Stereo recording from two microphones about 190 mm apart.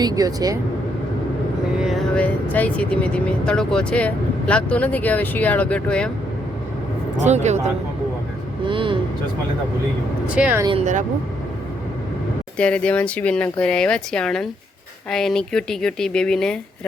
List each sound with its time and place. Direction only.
0.0 s speech: 20° right (ahead or behind)
1.8 s speech: centre (ahead or behind)
7.2 s speech: 35° right (ahead or behind)
8.6 s vehicle: 25° right (ahead or behind)
10.2 s speech: 5° right (ahead or behind)
10.7 s speech: 35° right (ahead or behind)
12.5 s speech: 5° left (ahead or behind)